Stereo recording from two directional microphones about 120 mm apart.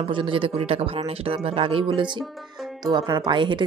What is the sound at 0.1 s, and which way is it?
A woman's voice, 45° right (ahead or behind).